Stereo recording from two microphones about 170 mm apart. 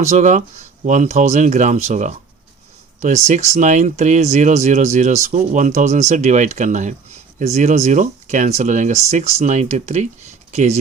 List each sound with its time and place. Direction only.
0.0 s speech: 45° right (ahead or behind)
3.2 s speech: 40° right (ahead or behind)